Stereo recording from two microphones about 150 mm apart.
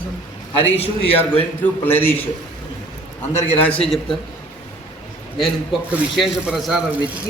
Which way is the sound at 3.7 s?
5° left (ahead or behind).